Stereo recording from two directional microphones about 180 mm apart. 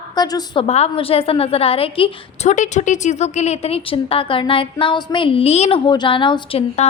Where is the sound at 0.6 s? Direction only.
35° left (ahead or behind).